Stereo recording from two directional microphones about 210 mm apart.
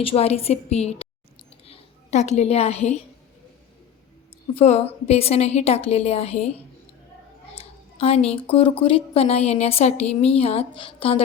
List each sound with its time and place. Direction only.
0.0 s a woman's voice: 30° left (ahead or behind)
4.6 s a woman's voice: 30° left (ahead or behind)
7.6 s a woman's voice: 30° left (ahead or behind)